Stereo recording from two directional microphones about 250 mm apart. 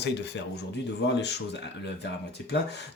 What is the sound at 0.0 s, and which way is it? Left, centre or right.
Speech, left.